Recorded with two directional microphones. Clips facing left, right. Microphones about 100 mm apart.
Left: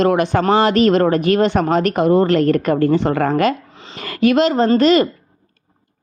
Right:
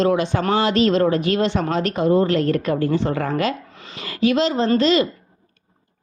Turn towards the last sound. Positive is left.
turn(degrees=50)  # may be behind; listen again after turning